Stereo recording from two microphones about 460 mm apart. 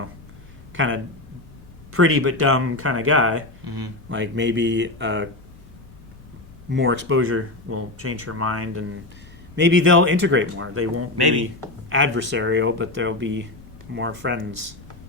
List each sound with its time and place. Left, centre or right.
0.7 s speech: right
6.7 s speech: right